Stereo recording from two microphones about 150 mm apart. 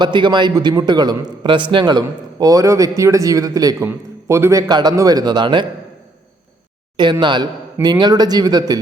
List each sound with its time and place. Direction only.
0.0 s a man's voice: 30° right (ahead or behind)
6.9 s a man's voice: 30° right (ahead or behind)